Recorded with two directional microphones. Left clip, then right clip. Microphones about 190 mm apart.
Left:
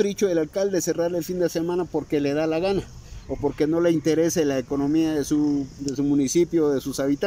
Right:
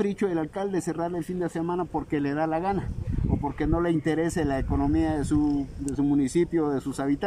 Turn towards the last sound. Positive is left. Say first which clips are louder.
# left 4 dB
turn(degrees=0)  # may be behind; listen again after turning